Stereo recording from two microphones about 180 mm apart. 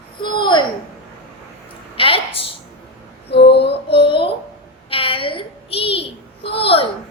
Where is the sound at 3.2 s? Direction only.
65° left (ahead or behind).